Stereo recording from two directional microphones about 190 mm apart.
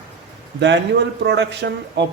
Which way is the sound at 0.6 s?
65° right (ahead or behind).